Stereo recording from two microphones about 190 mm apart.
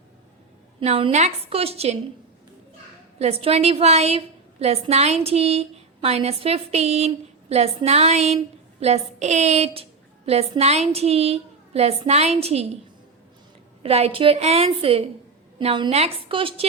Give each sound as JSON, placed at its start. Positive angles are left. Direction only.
{"t": 0.8, "sound": "a woman's voice", "side_deg": -30}
{"t": 3.2, "sound": "a woman's voice", "side_deg": -35}
{"t": 13.8, "sound": "a woman's voice", "side_deg": -30}